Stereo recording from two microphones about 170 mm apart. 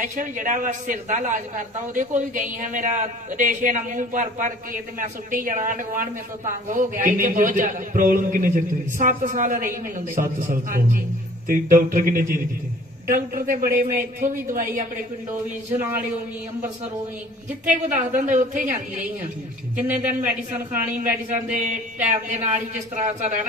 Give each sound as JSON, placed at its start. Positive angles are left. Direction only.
{"t": 0.0, "sound": "speech", "side_deg": -50}
{"t": 17.6, "sound": "speech", "side_deg": -50}
{"t": 20.7, "sound": "speech", "side_deg": -50}